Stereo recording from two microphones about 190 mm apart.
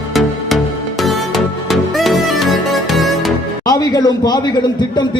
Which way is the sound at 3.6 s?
20° left (ahead or behind).